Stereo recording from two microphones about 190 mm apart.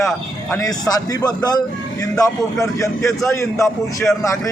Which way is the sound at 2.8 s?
15° left (ahead or behind).